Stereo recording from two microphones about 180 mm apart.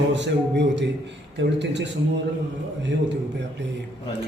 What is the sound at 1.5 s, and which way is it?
Speech, 75° right (ahead or behind).